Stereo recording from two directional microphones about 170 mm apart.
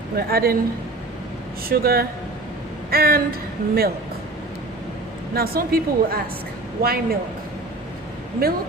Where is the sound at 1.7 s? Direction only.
65° right (ahead or behind).